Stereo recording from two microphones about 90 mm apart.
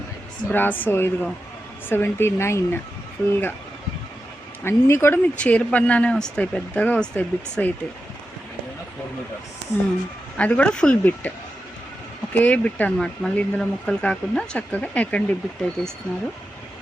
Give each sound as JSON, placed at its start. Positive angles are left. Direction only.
{"t": 0.4, "sound": "speech", "side_deg": 20}
{"t": 4.6, "sound": "speech", "side_deg": 25}
{"t": 10.3, "sound": "speech", "side_deg": 15}
{"t": 12.3, "sound": "speech", "side_deg": 15}